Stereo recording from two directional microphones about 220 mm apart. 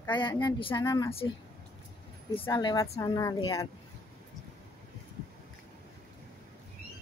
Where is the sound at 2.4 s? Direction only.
15° left (ahead or behind).